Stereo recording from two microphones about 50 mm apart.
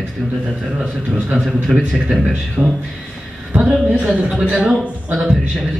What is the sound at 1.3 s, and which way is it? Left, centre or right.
Speech, centre.